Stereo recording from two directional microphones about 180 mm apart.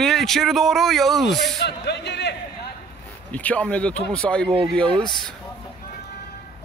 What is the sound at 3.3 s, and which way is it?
Speech, 10° left (ahead or behind).